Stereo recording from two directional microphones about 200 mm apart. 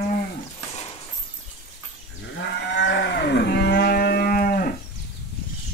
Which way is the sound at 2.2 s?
60° left (ahead or behind).